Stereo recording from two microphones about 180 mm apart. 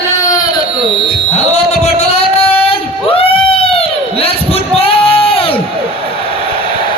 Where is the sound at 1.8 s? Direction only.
35° left (ahead or behind).